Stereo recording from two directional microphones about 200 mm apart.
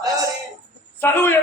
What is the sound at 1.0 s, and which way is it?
Speech, 10° left (ahead or behind).